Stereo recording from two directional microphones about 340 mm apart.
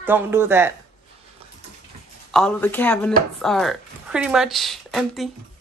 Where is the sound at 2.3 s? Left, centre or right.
Centre.